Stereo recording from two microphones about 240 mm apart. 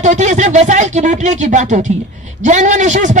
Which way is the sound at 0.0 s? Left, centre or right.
Right.